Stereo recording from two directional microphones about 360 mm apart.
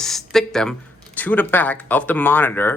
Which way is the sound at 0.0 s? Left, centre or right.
Centre.